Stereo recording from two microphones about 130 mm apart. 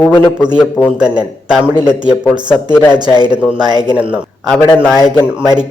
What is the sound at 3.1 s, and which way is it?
Speech, 35° right (ahead or behind).